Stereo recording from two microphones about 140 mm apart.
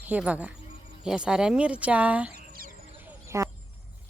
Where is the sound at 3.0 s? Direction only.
20° right (ahead or behind).